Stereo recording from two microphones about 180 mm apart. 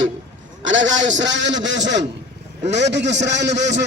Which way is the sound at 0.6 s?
90° right.